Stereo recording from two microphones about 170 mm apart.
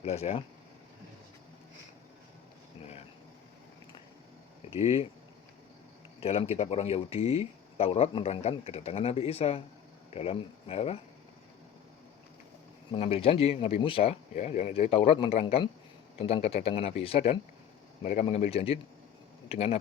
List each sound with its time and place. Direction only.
0.0 s speech: 35° left (ahead or behind)
4.7 s speech: 35° left (ahead or behind)
6.1 s speech: 35° left (ahead or behind)
12.9 s speech: 35° left (ahead or behind)